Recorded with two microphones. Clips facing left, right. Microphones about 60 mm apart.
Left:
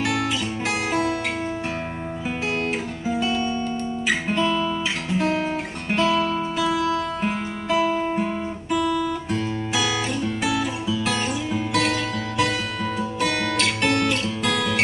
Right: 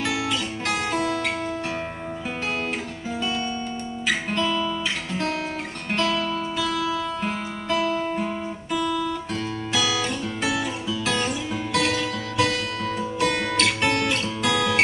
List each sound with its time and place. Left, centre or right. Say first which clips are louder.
0.7 s music: left 1 dB; centre
3.1 s music: left 4 dB; centre
4.1 s guitar: left 2 dB; centre
5.9 s music: left 3 dB; centre
8.7 s guitar: left 2 dB; centre